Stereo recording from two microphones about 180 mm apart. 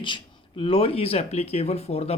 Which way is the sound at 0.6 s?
30° left (ahead or behind).